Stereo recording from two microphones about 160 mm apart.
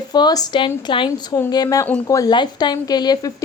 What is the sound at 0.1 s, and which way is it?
A woman's voice, 25° left (ahead or behind).